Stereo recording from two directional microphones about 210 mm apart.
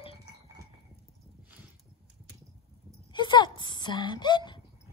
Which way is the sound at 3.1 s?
20° left (ahead or behind).